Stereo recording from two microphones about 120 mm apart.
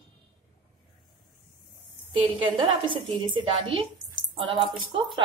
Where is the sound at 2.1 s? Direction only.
45° right (ahead or behind).